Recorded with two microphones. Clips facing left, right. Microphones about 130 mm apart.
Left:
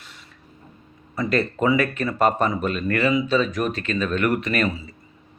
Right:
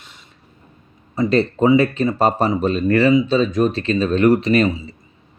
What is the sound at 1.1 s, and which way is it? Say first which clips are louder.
Speech: right 6 dB; 25° right (ahead or behind).